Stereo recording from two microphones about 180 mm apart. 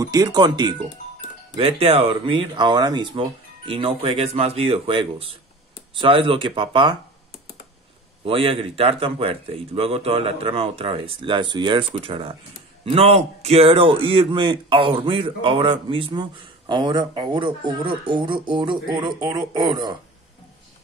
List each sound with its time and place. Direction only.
0.0 s a man's voice: 20° right (ahead or behind)
8.3 s a man's voice: 30° right (ahead or behind)